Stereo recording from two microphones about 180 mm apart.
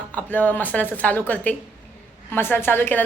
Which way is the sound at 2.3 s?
10° left (ahead or behind).